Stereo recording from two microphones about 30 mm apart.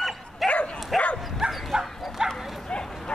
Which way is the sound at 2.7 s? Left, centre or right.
Left.